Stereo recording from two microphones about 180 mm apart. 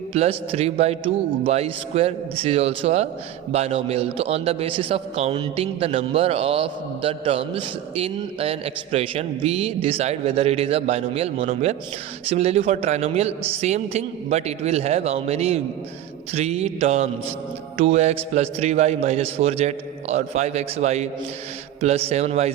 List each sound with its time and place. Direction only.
0.1 s a man's voice: 35° right (ahead or behind)